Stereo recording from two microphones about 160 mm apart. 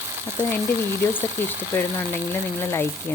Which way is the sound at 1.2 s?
15° left (ahead or behind).